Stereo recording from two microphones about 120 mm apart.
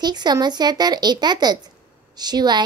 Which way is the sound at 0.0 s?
35° right (ahead or behind).